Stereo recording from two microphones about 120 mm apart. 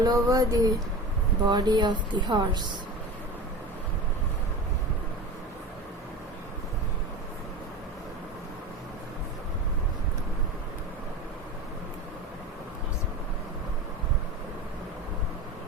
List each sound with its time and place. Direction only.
0.0 s a woman's voice: 30° right (ahead or behind)